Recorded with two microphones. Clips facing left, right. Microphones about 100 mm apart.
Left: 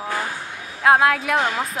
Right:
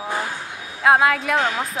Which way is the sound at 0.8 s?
Centre (ahead or behind).